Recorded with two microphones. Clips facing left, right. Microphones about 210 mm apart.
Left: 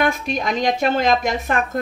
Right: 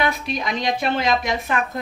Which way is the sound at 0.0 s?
50° left (ahead or behind).